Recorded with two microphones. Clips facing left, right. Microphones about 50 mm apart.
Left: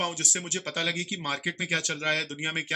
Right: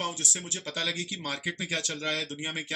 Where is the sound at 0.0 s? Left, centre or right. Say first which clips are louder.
Left 3 dB; left.